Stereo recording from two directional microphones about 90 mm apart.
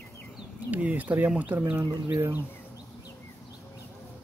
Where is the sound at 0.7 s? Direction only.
15° right (ahead or behind).